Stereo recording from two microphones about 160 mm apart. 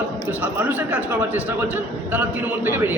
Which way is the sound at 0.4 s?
10° right (ahead or behind).